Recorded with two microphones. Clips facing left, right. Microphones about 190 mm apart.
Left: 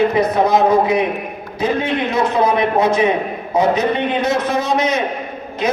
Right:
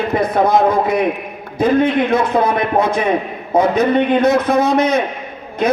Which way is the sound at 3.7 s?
55° right (ahead or behind).